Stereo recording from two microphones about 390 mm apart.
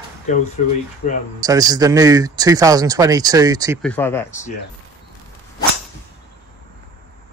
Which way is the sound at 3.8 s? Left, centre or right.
Centre.